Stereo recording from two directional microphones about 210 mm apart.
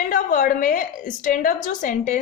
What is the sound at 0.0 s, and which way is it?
A woman's voice, 40° left (ahead or behind).